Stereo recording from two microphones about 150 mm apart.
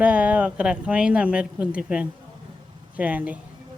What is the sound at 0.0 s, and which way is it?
Speech, 10° right (ahead or behind).